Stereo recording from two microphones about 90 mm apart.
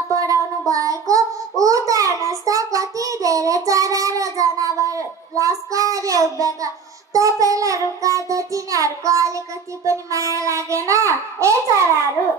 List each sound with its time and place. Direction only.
0.1 s child singing: 40° right (ahead or behind)